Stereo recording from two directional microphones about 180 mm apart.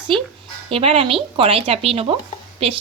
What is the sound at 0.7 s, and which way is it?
A woman's voice, 30° right (ahead or behind).